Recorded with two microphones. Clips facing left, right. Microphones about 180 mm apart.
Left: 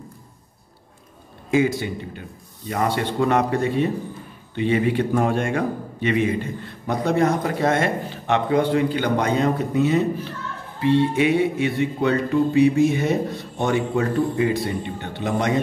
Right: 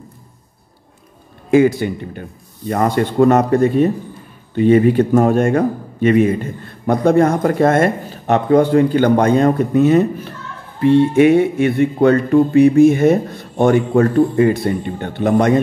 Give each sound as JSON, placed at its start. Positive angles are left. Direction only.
{"t": 1.5, "sound": "a man's voice", "side_deg": -55}